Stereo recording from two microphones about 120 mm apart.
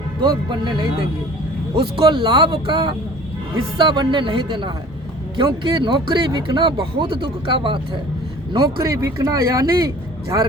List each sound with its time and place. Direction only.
0.2 s speech: 40° right (ahead or behind)
8.5 s speech: 25° right (ahead or behind)